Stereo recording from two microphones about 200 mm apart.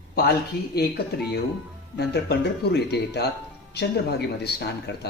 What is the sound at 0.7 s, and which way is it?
Speech, 55° left (ahead or behind).